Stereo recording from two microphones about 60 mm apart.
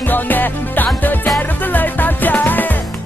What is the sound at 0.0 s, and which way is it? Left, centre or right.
Music, left.